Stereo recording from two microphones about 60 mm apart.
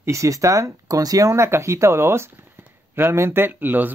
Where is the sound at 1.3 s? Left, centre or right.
Right.